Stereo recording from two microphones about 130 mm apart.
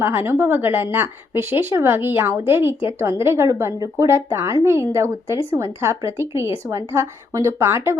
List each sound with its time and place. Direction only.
0.0 s a woman's voice: 15° right (ahead or behind)